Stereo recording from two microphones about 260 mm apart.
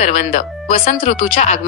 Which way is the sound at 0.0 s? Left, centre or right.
Left.